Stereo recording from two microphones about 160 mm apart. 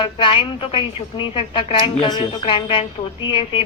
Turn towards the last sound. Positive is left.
turn(degrees=35)  # may be behind; listen again after turning